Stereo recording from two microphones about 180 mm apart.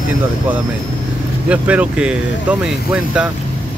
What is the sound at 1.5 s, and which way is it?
Speech, 5° right (ahead or behind).